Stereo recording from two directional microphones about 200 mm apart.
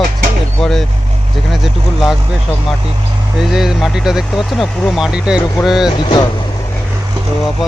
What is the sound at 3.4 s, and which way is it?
Speech, centre (ahead or behind).